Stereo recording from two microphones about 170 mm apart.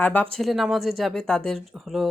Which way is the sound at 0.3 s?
Centre (ahead or behind).